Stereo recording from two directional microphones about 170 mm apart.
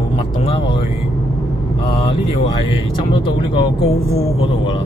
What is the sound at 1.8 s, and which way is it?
Speech, 35° left (ahead or behind).